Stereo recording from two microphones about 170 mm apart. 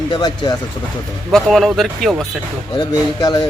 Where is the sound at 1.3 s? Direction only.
Centre (ahead or behind).